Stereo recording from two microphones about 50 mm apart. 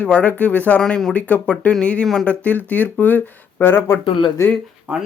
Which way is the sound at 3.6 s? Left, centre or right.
Left.